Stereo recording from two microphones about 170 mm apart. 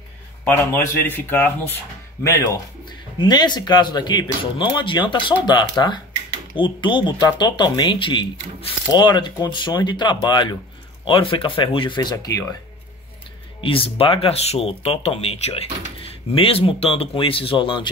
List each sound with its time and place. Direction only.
0.5 s speech: 15° left (ahead or behind)
13.6 s speech: 30° left (ahead or behind)